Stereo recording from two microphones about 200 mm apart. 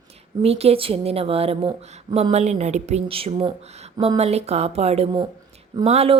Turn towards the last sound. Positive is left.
turn(degrees=-30)  # may be behind; listen again after turning